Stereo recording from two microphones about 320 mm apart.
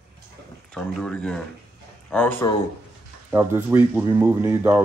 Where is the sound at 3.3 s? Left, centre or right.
Centre.